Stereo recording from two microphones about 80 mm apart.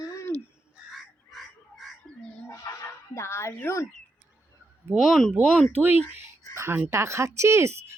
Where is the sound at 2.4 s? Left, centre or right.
Left.